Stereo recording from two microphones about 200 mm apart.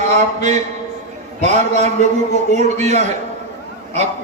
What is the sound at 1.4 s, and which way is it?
Speech, 35° right (ahead or behind).